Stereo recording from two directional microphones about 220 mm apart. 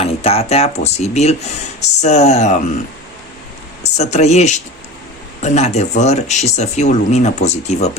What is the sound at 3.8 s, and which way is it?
Speech, 30° left (ahead or behind).